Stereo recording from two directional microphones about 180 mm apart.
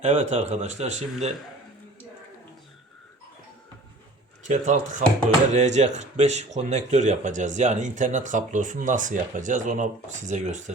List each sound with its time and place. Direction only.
0.0 s speech: 35° right (ahead or behind)
4.4 s speech: 40° right (ahead or behind)